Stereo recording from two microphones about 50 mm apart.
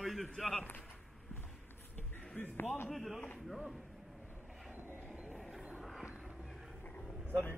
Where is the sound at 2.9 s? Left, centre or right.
Centre.